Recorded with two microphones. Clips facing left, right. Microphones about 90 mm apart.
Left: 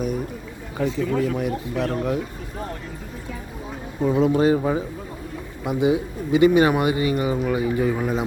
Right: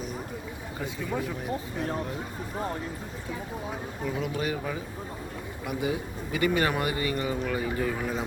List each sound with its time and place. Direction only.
1.2 s speech: 90° left
4.0 s speech: 30° left (ahead or behind)
5.6 s speech: 20° left (ahead or behind)